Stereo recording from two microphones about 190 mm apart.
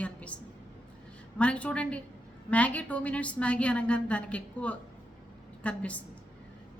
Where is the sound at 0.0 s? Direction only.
5° left (ahead or behind).